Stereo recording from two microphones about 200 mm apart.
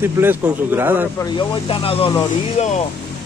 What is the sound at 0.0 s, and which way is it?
A man's voice, 10° right (ahead or behind).